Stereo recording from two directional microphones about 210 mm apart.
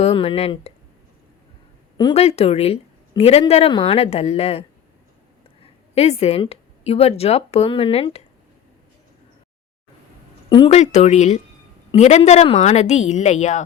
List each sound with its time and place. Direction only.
0.0 s a woman's voice: 25° left (ahead or behind)
2.0 s a woman's voice: 25° left (ahead or behind)
5.9 s a woman's voice: 30° left (ahead or behind)
10.5 s a woman's voice: 25° left (ahead or behind)